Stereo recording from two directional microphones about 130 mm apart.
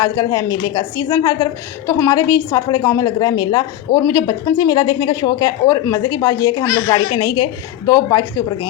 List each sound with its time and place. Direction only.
0.0 s a woman's voice: 25° left (ahead or behind)
7.9 s speech: 20° left (ahead or behind)